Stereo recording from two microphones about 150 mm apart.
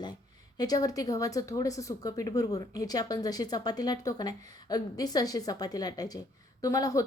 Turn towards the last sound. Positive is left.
turn(degrees=25)  # may be behind; listen again after turning